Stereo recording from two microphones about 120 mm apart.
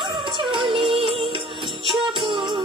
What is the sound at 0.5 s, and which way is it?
Music, 45° right (ahead or behind).